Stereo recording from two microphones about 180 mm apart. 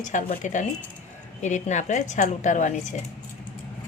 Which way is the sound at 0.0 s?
45° left (ahead or behind).